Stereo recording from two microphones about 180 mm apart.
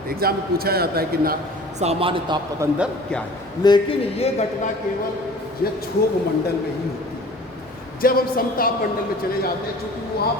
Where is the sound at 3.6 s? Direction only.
20° left (ahead or behind).